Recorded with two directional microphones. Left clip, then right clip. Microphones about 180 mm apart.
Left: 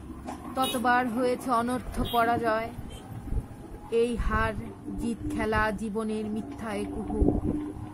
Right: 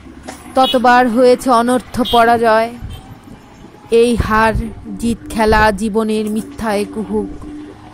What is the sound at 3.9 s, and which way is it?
Speech, 40° right (ahead or behind).